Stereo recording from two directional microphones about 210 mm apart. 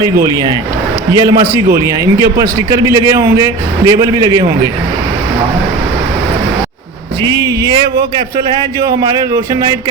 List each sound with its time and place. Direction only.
0.0 s a man's voice: 20° right (ahead or behind)
7.3 s speech: 20° right (ahead or behind)
9.0 s speech: 20° right (ahead or behind)